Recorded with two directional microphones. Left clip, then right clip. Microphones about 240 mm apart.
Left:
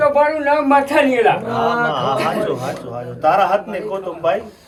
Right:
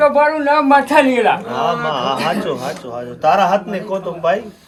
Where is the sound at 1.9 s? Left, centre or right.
Right.